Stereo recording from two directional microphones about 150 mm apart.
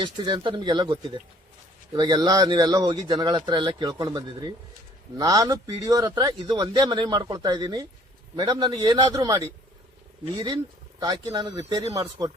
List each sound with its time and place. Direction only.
0.0 s speech: 30° right (ahead or behind)
11.0 s speech: 25° right (ahead or behind)